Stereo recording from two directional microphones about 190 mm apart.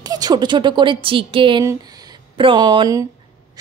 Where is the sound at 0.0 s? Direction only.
20° right (ahead or behind).